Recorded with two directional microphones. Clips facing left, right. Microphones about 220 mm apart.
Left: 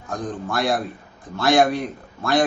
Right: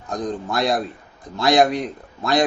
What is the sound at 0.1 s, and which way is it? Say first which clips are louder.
A man's voice: right 2 dB; 20° right (ahead or behind).